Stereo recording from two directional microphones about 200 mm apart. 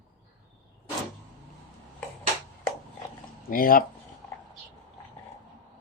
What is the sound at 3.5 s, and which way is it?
Speech, 45° left (ahead or behind).